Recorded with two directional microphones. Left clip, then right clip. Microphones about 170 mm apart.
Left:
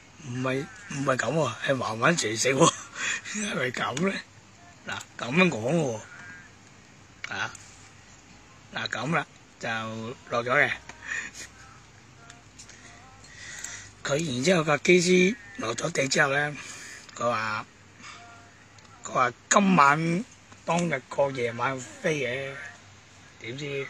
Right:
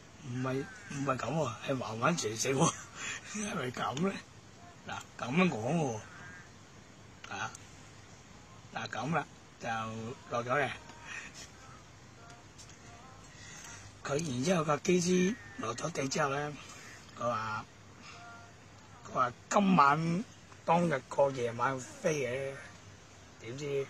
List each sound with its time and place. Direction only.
1.0 s speech: 5° left (ahead or behind)
7.2 s speech: centre (ahead or behind)
8.7 s speech: centre (ahead or behind)
14.0 s speech: 5° right (ahead or behind)
19.1 s speech: 5° left (ahead or behind)
23.6 s speech: centre (ahead or behind)